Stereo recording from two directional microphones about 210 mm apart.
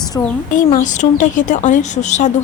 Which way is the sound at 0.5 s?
40° left (ahead or behind).